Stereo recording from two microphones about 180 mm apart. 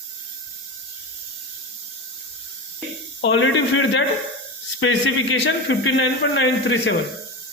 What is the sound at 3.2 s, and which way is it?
Speech, 90° left.